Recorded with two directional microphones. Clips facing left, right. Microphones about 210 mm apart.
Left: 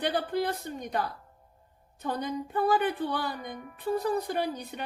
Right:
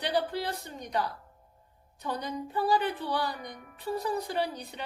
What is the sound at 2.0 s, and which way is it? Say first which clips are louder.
A woman's voice: left 2 dB; 55° left (ahead or behind).